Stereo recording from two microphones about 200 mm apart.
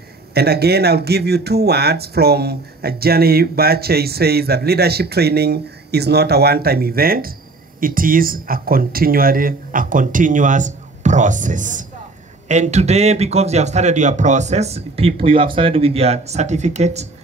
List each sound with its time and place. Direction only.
0.3 s a man's voice: 50° right (ahead or behind); by 17.1 s 35° right (ahead or behind)